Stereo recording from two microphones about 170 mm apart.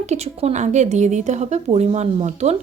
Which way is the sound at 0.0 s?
40° right (ahead or behind).